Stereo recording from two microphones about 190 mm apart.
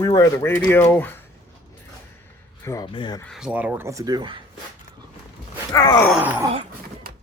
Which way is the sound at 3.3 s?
5° right (ahead or behind).